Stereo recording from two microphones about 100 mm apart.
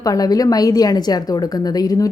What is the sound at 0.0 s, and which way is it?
A woman's voice, 40° left (ahead or behind).